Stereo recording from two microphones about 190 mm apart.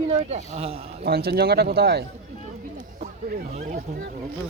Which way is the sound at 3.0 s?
50° right (ahead or behind).